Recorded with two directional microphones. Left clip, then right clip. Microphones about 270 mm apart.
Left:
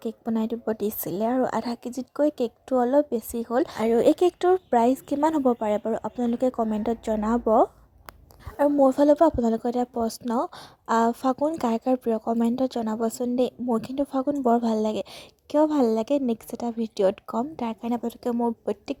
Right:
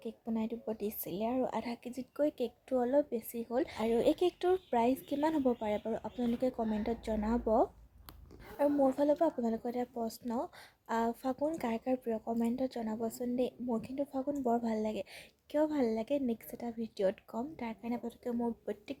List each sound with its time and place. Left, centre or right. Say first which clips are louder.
0.0 s speech: left 10 dB; left